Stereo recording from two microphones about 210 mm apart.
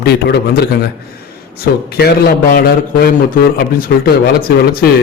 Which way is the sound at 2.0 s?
50° left (ahead or behind).